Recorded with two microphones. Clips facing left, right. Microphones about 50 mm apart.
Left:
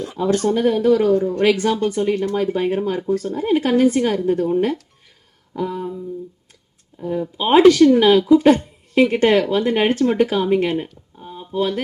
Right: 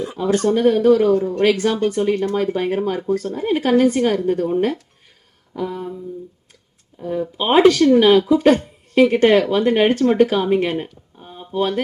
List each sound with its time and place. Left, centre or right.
0.0 s speech: centre
7.0 s speech: centre
11.2 s a sound: centre